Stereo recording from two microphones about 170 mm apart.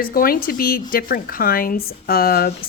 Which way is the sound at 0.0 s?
55° left (ahead or behind).